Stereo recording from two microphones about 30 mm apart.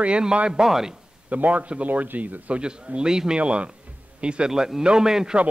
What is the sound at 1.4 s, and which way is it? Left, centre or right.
Speech, right.